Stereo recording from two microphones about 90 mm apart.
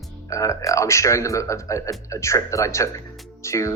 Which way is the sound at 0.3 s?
35° left (ahead or behind).